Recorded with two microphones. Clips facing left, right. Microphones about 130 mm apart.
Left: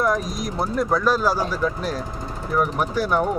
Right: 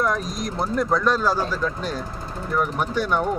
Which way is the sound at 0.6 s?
5° left (ahead or behind).